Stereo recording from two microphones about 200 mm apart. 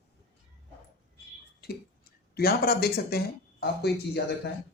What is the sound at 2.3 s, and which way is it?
Speech, 50° left (ahead or behind).